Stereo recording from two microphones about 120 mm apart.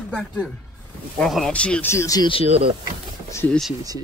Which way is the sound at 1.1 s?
Centre (ahead or behind).